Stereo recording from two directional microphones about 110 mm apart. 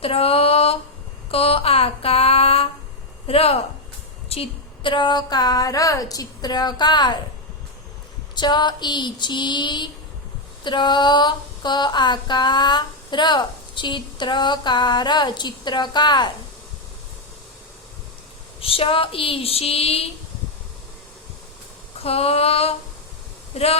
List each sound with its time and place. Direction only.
0.0 s a sound: 60° left (ahead or behind)
3.2 s speech: 65° left (ahead or behind); by 7.2 s 40° left (ahead or behind)
8.4 s female singing: 40° left (ahead or behind)
18.6 s speech: 55° left (ahead or behind)
22.0 s female singing: 65° left (ahead or behind)
23.5 s female singing: 75° left (ahead or behind)